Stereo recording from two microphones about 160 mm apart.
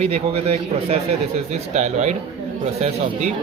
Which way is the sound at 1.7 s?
45° right (ahead or behind).